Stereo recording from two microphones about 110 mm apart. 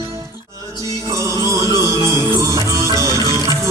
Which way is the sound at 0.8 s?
30° right (ahead or behind).